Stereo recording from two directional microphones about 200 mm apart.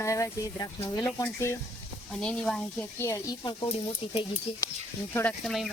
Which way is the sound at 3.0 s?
15° left (ahead or behind).